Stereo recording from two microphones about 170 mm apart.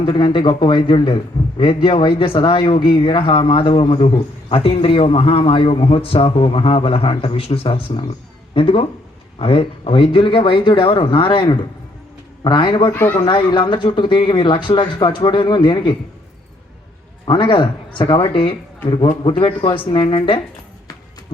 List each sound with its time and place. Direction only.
0.0 s a man's voice: 30° left (ahead or behind)
12.9 s speech: 10° left (ahead or behind)
13.1 s speech: 25° left (ahead or behind)
17.2 s speech: 30° left (ahead or behind)